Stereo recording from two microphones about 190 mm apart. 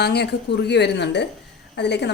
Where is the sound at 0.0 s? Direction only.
60° left (ahead or behind).